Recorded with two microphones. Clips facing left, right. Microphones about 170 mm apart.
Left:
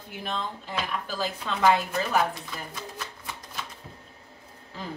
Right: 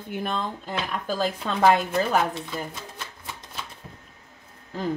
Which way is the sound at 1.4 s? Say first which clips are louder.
Right 4 dB; 45° right (ahead or behind).